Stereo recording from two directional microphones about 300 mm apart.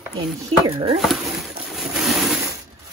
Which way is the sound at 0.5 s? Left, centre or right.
Centre.